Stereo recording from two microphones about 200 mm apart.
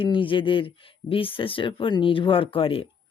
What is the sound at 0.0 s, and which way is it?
Speech, 25° left (ahead or behind).